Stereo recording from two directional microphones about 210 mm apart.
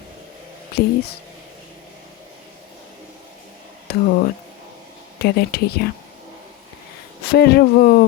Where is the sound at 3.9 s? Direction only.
50° left (ahead or behind).